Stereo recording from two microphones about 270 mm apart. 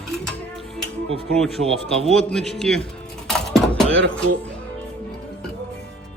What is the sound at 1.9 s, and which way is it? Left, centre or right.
Speech, centre.